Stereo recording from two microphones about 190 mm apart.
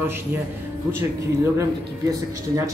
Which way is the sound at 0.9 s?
15° right (ahead or behind).